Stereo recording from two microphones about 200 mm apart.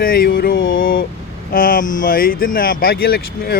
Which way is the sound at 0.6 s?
70° left (ahead or behind).